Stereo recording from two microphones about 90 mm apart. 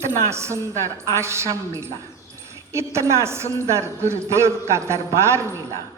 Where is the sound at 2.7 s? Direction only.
30° right (ahead or behind).